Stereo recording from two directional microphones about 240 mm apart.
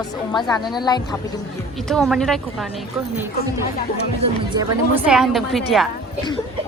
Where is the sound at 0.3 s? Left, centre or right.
Centre.